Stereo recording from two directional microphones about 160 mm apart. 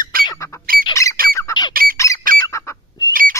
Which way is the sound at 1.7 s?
65° right (ahead or behind).